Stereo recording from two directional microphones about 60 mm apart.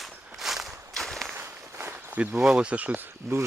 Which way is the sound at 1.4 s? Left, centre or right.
Right.